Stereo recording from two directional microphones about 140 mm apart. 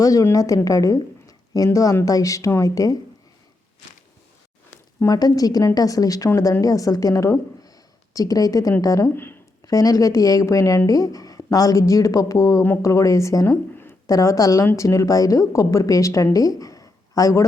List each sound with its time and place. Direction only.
0.0 s speech: 25° left (ahead or behind)
4.9 s speech: 25° left (ahead or behind)
9.6 s speech: 25° left (ahead or behind)